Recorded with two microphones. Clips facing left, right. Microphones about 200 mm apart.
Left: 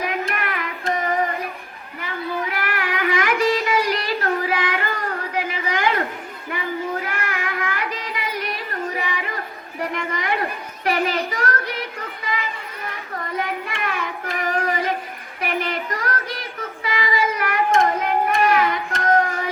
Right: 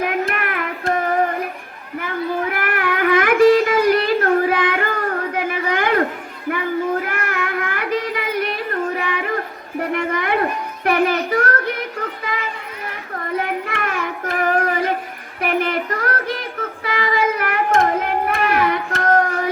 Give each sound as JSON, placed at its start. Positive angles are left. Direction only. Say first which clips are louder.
{"t": 0.0, "sound": "carnatic music", "louder": "right 4 dB", "side_deg": -50}
{"t": 2.5, "sound": "child singing", "louder": "right 4 dB", "side_deg": -55}
{"t": 9.9, "sound": "a sound", "louder": "right 6 dB", "side_deg": -55}
{"t": 13.7, "sound": "child singing", "louder": "right 3 dB", "side_deg": -50}